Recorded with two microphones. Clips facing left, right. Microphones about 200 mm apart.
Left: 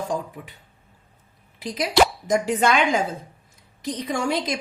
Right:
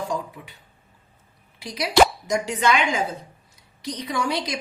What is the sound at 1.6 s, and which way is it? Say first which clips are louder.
A woman's voice: right 1 dB; 50° left (ahead or behind).